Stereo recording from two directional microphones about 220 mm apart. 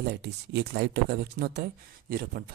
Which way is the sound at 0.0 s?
50° right (ahead or behind).